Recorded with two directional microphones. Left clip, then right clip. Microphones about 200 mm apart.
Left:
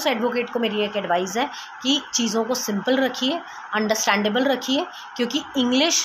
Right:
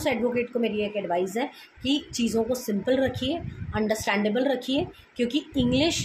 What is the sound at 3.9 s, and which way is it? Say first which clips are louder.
A woman's voice: left 5 dB; centre (ahead or behind).